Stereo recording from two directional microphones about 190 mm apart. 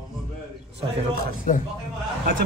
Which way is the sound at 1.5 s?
40° left (ahead or behind).